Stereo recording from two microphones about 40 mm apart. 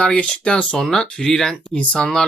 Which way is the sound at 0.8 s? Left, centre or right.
Centre.